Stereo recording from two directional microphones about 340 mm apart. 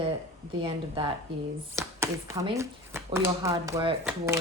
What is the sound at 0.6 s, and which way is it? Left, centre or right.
Speech, centre.